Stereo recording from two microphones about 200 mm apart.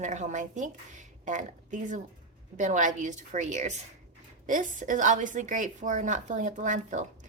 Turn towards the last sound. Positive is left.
turn(degrees=-40)  # may be behind; listen again after turning